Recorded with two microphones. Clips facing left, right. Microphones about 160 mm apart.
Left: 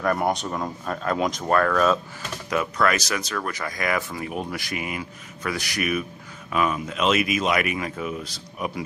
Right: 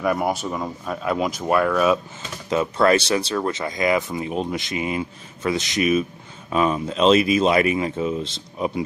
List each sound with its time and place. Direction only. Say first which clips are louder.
0.0 s speech: right 1 dB; 5° right (ahead or behind)
2.5 s speech: right 5 dB; 25° right (ahead or behind)